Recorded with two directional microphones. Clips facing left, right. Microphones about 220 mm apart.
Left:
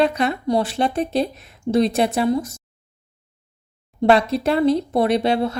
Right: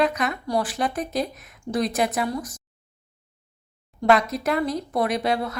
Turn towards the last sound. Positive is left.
turn(degrees=25)  # may be behind; listen again after turning